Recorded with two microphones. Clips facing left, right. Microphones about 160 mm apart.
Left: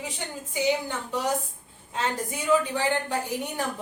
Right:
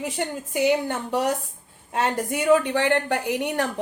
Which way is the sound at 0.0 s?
65° right (ahead or behind).